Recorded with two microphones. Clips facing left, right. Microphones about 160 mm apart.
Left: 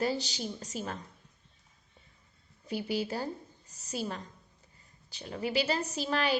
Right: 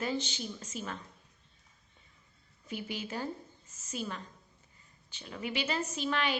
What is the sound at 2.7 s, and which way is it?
A woman's voice, 35° left (ahead or behind).